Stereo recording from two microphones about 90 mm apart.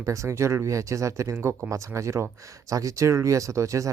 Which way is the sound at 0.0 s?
35° right (ahead or behind).